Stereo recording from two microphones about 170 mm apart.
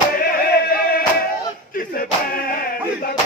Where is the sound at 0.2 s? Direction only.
60° left (ahead or behind).